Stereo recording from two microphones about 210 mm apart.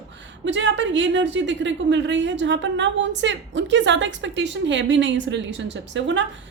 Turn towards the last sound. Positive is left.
turn(degrees=-60)  # may be behind; listen again after turning